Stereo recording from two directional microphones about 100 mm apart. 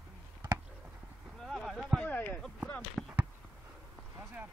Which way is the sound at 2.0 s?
15° left (ahead or behind).